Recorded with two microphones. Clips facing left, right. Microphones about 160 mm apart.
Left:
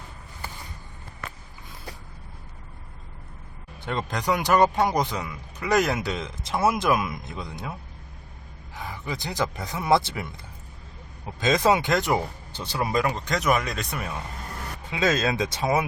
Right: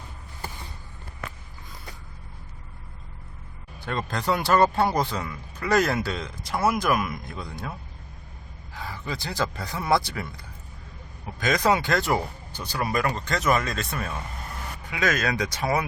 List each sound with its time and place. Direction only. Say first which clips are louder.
3.8 s speech: even; 15° left (ahead or behind)
8.7 s speech: even; 15° left (ahead or behind)
11.3 s speech: left 2 dB; 25° left (ahead or behind)